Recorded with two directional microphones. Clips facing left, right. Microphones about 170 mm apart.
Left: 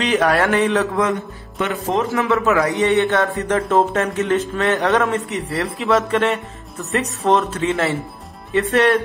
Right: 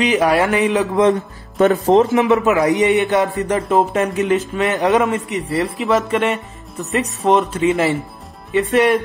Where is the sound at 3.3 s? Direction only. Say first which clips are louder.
Right 1 dB; centre (ahead or behind).